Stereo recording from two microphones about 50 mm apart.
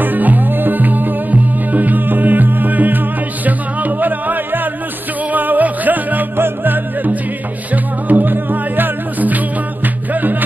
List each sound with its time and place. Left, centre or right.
0.0 s music: right